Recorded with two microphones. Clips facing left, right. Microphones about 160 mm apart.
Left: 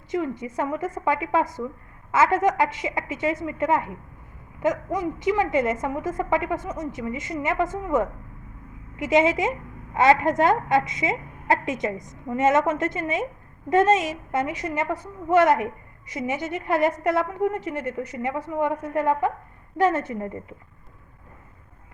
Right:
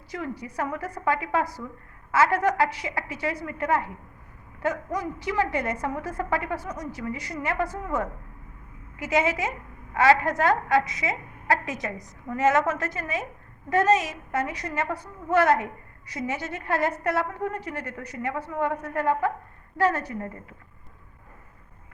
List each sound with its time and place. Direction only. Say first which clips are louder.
0.1 s a woman's voice: left 7 dB; 25° left (ahead or behind)